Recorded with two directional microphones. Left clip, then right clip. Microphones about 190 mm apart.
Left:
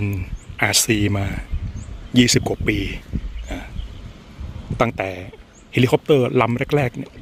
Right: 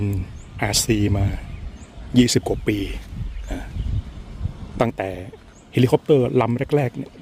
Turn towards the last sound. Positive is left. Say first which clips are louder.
# left 1 dB
turn(degrees=-10)  # may be behind; listen again after turning